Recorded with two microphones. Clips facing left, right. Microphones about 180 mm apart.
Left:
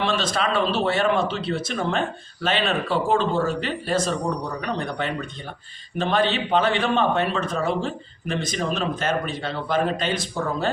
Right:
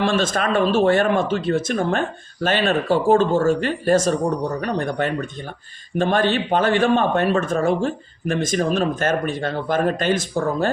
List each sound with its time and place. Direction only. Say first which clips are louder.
0.0 s speech: right 4 dB; 50° right (ahead or behind)